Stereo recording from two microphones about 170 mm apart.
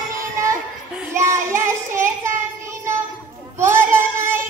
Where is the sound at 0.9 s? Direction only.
15° right (ahead or behind).